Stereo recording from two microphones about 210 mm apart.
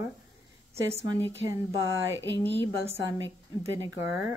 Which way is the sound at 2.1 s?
60° right (ahead or behind).